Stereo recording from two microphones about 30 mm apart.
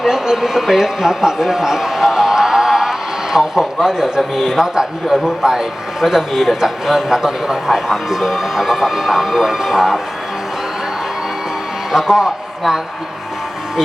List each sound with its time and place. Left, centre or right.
0.0 s a man's voice: centre
11.9 s a man's voice: centre